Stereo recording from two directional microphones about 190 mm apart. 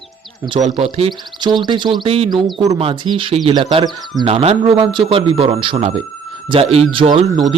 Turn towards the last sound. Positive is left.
turn(degrees=-30)  # may be behind; listen again after turning